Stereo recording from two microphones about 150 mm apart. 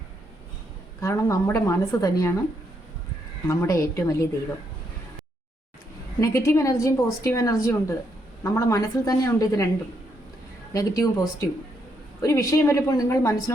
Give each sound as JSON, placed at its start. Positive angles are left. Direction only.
{"t": 1.0, "sound": "a woman's voice", "side_deg": 20}
{"t": 3.4, "sound": "a woman's voice", "side_deg": 20}
{"t": 6.1, "sound": "a woman's voice", "side_deg": 20}
{"t": 10.7, "sound": "a woman's voice", "side_deg": 20}